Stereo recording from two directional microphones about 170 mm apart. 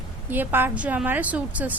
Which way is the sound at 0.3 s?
10° right (ahead or behind).